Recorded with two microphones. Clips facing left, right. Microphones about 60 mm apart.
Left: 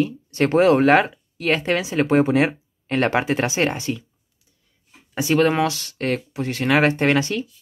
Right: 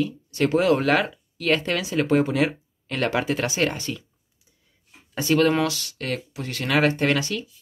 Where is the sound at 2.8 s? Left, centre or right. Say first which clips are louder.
Left 4 dB; left.